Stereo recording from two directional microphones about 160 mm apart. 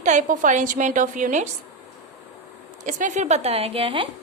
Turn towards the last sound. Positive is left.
turn(degrees=-35)  # may be behind; listen again after turning